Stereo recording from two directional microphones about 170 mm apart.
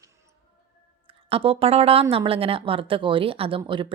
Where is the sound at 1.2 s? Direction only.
35° right (ahead or behind).